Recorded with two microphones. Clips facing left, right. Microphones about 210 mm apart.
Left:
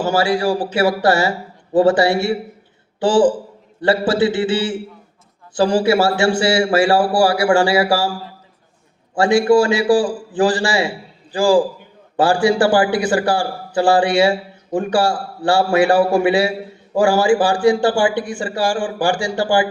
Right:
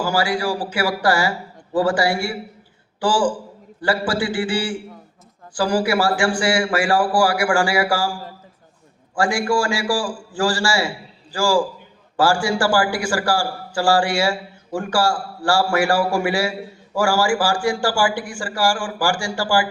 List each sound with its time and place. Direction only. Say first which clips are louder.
0.0 s a man's voice: left 4 dB; 25° left (ahead or behind)
9.1 s a man's voice: left 7 dB; 20° left (ahead or behind)